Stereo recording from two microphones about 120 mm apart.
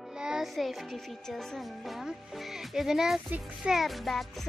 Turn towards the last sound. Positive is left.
turn(degrees=0)  # may be behind; listen again after turning